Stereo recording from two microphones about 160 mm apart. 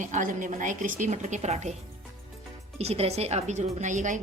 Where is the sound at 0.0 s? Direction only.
55° right (ahead or behind).